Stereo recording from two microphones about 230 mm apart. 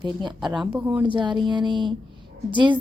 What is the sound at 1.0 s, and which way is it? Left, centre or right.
Speech, right.